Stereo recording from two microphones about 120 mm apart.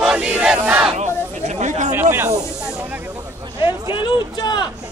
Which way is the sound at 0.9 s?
75° right (ahead or behind).